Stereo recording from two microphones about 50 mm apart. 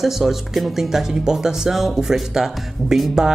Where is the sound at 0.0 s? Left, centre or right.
Centre.